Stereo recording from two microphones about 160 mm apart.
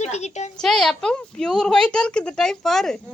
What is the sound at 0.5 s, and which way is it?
Speech, 5° left (ahead or behind).